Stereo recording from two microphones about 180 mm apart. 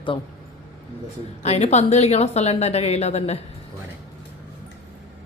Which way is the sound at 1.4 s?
40° left (ahead or behind).